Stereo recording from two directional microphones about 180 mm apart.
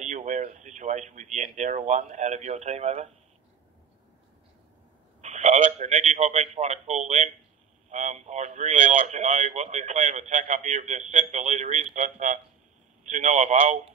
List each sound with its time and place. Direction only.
0.0 s speech: 40° right (ahead or behind)
5.2 s speech: 40° right (ahead or behind)